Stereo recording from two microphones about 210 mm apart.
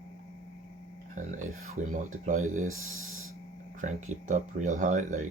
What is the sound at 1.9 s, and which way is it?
Speech, 40° right (ahead or behind).